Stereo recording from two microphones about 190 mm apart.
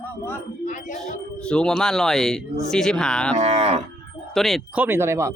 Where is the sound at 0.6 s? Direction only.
40° left (ahead or behind).